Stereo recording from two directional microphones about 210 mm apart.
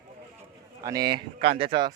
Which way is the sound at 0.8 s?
15° right (ahead or behind).